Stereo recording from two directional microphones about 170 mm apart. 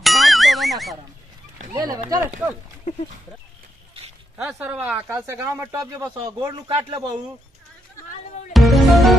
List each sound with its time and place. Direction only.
0.0 s clang: centre (ahead or behind)
1.7 s speech: 20° right (ahead or behind)
4.4 s speech: 10° right (ahead or behind)
8.5 s music: centre (ahead or behind)